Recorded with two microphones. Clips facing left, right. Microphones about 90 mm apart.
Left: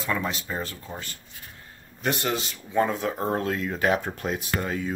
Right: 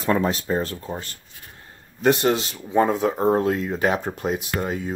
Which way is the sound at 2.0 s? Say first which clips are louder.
Right 8 dB; 25° right (ahead or behind).